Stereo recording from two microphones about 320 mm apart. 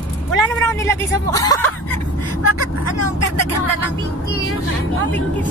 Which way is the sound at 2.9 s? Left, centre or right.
Left.